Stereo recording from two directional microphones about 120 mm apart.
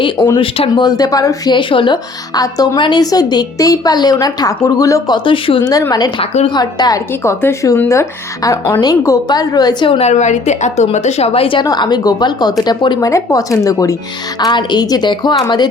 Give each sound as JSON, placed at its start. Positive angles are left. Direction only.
{"t": 0.0, "sound": "a woman's voice", "side_deg": 40}
{"t": 0.4, "sound": "a woman's voice", "side_deg": 55}
{"t": 0.8, "sound": "a woman's voice", "side_deg": 35}
{"t": 1.5, "sound": "a woman's voice", "side_deg": 40}
{"t": 5.1, "sound": "a woman's voice", "side_deg": 45}
{"t": 7.1, "sound": "a woman's voice", "side_deg": 20}
{"t": 9.9, "sound": "a woman's voice", "side_deg": 65}
{"t": 11.6, "sound": "a woman's voice", "side_deg": 35}
{"t": 13.1, "sound": "a woman's voice", "side_deg": 25}